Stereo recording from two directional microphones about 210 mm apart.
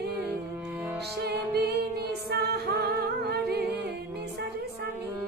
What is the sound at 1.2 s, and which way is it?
Music, 50° right (ahead or behind).